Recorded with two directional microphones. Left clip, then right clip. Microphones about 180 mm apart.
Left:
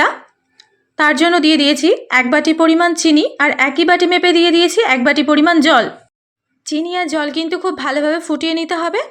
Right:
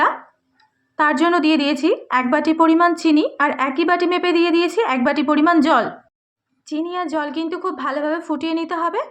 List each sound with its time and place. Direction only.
0.9 s a woman's voice: 20° left (ahead or behind)